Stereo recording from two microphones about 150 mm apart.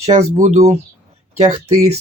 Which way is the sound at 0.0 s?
45° right (ahead or behind).